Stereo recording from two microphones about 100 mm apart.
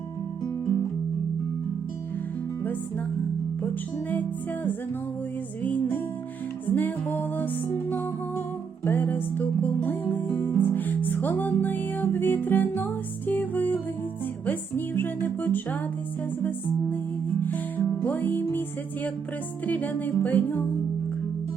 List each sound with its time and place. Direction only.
6.7 s music: 20° left (ahead or behind)
19.6 s music: 15° left (ahead or behind)